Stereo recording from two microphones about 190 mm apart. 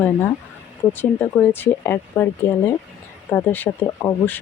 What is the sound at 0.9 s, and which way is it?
Speech, 10° left (ahead or behind).